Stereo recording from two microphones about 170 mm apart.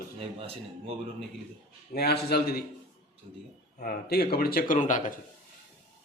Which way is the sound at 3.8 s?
65° left (ahead or behind).